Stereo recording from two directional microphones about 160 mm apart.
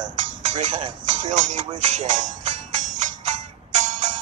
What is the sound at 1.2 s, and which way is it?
Speech, 50° right (ahead or behind).